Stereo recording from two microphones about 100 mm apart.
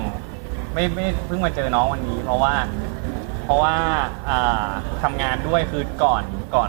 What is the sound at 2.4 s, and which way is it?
Speech, 10° right (ahead or behind).